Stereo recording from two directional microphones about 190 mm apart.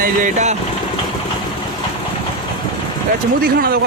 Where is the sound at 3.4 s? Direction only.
55° right (ahead or behind).